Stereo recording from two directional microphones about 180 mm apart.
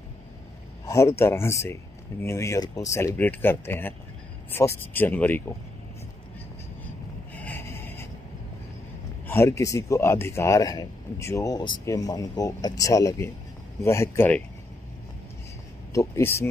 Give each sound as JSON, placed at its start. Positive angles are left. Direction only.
{"t": 0.8, "sound": "speech", "side_deg": 15}
{"t": 7.3, "sound": "a sound", "side_deg": 10}
{"t": 9.3, "sound": "speech", "side_deg": 15}
{"t": 15.9, "sound": "speech", "side_deg": 15}